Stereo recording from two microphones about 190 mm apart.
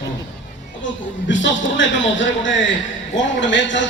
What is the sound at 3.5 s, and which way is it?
Speech, 70° left (ahead or behind).